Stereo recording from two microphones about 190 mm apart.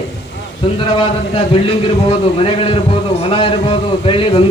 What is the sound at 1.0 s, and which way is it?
Speech, 25° left (ahead or behind).